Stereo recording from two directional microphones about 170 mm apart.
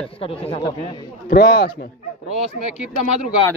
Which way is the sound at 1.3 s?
65° left (ahead or behind).